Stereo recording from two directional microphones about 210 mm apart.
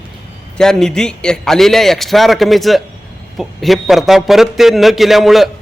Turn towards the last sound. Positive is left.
turn(degrees=0)  # may be behind; listen again after turning